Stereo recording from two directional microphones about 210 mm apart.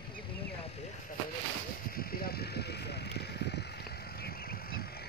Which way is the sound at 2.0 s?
45° left (ahead or behind).